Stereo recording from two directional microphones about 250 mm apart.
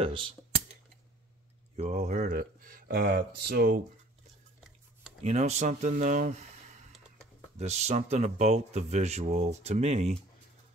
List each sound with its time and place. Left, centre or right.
0.0 s speech: right
1.8 s speech: right
5.2 s speech: right